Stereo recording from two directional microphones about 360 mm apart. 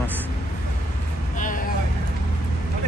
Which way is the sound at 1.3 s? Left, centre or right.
Left.